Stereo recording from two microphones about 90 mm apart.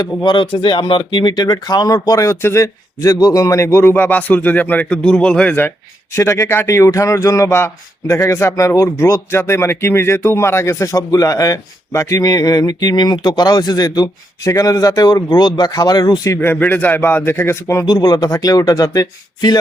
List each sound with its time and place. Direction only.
0.0 s speech: 55° left (ahead or behind); by 5.5 s 10° left (ahead or behind)
5.5 s speech: 25° left (ahead or behind); by 16.3 s 50° left (ahead or behind)
16.3 s speech: 25° left (ahead or behind)
17.8 s speech: 50° left (ahead or behind)